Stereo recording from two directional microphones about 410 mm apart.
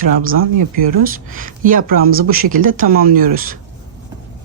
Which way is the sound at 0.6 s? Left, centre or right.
Right.